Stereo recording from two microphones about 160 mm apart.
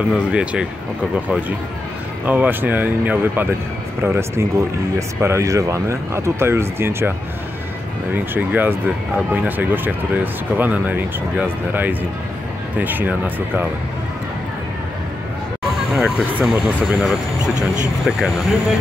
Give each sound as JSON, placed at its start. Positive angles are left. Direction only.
{"t": 0.1, "sound": "speech", "side_deg": -5}
{"t": 2.2, "sound": "speech", "side_deg": -10}
{"t": 15.9, "sound": "speech", "side_deg": 0}